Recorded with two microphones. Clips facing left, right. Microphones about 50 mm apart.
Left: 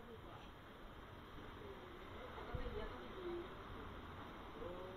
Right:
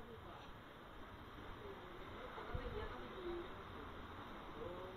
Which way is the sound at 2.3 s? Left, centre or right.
Right.